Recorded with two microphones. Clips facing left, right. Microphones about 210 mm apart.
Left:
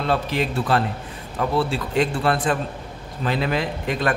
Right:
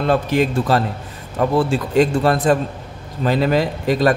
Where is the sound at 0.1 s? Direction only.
45° right (ahead or behind).